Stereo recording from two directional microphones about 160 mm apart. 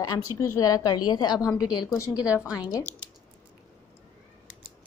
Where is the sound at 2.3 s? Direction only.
5° right (ahead or behind).